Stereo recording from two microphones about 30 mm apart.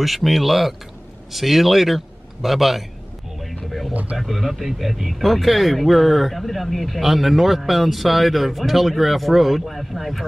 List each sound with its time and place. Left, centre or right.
0.0 s a man's voice: centre
3.3 s a sound: centre
3.9 s speech: right
4.2 s speech: centre
5.2 s speech: centre